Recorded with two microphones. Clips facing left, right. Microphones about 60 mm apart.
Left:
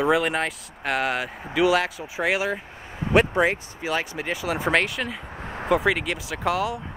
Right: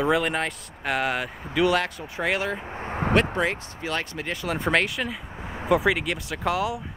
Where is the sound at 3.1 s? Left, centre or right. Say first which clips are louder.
Left 5 dB; centre.